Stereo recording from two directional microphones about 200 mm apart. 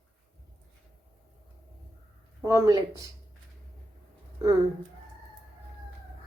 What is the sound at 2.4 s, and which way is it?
Speech, 15° right (ahead or behind).